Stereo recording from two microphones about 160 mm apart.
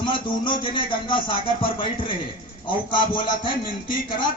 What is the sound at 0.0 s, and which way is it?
Speech, 30° left (ahead or behind).